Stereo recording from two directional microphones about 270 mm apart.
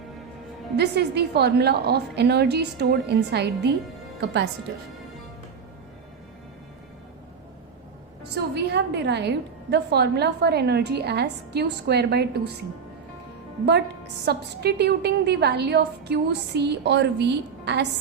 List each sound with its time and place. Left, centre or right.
0.8 s a woman's voice: right
8.2 s a woman's voice: right
14.3 s a woman's voice: right